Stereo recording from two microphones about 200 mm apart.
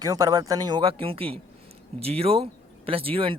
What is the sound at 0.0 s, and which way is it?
Speech, 20° right (ahead or behind).